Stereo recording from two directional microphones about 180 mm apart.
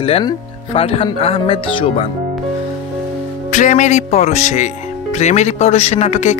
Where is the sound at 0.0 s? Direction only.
30° left (ahead or behind).